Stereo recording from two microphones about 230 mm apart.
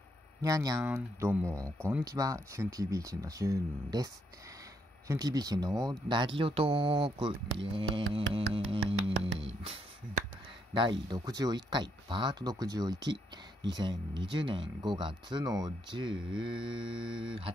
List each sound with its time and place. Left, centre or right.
0.4 s speech: centre